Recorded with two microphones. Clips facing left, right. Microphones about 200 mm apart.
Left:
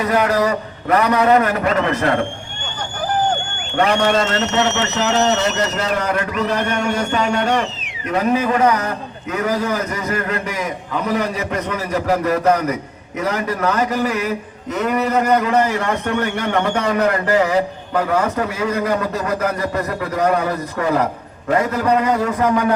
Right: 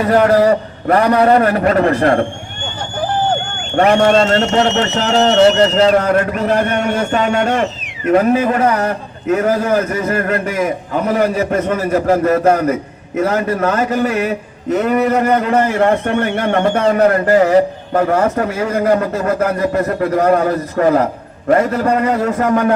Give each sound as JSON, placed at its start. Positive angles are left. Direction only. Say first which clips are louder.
{"t": 0.0, "sound": "a man's voice", "louder": "right 6 dB", "side_deg": -40}
{"t": 3.8, "sound": "a man's voice", "louder": "right 5 dB", "side_deg": -45}
{"t": 6.0, "sound": "a man's voice", "louder": "right 5 dB", "side_deg": -45}